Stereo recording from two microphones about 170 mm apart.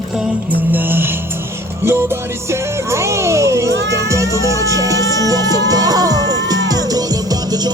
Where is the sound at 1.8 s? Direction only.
15° right (ahead or behind).